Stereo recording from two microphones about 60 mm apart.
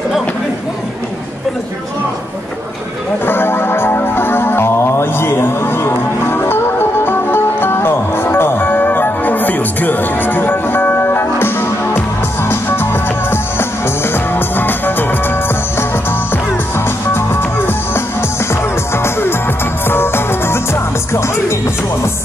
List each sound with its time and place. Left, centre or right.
3.3 s music: left
19.0 s music: left